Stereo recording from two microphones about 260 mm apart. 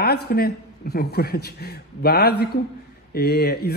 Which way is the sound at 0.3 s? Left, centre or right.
Left.